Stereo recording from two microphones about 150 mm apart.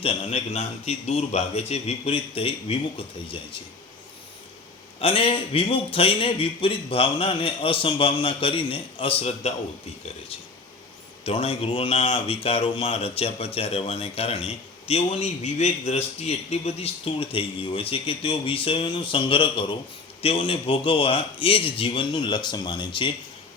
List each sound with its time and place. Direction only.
0.0 s a man's voice: 40° left (ahead or behind)
4.9 s speech: 40° left (ahead or behind)
11.2 s speech: 40° left (ahead or behind)